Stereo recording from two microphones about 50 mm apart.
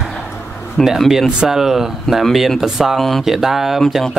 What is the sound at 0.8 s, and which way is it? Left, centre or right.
Speech, centre.